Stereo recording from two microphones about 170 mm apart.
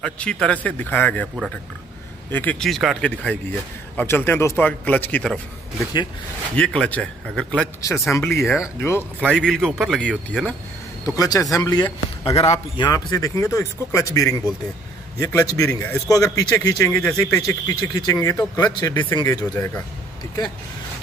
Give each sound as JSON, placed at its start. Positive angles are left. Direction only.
{"t": 0.0, "sound": "speech", "side_deg": 5}
{"t": 2.3, "sound": "speech", "side_deg": 5}
{"t": 8.2, "sound": "speech", "side_deg": 15}
{"t": 11.1, "sound": "a man's voice", "side_deg": 20}
{"t": 15.6, "sound": "speech", "side_deg": 5}
{"t": 16.1, "sound": "a man's voice", "side_deg": 20}